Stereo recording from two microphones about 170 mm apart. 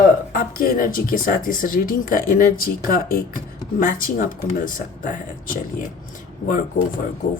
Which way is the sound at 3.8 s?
55° left (ahead or behind).